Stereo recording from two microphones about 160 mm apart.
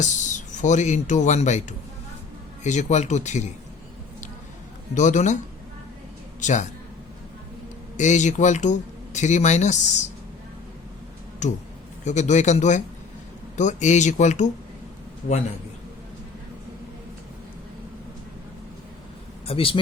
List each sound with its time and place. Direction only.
0.0 s speech: 50° left (ahead or behind)
2.6 s speech: 45° left (ahead or behind)
4.9 s speech: 50° left (ahead or behind)
6.4 s a man's voice: 50° left (ahead or behind)
7.9 s speech: 50° left (ahead or behind)
11.4 s speech: 50° left (ahead or behind)
19.5 s a man's voice: 35° left (ahead or behind)